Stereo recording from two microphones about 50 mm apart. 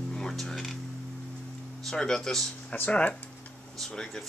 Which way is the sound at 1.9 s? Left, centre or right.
Centre.